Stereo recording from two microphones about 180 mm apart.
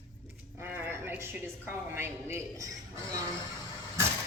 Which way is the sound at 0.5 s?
10° right (ahead or behind).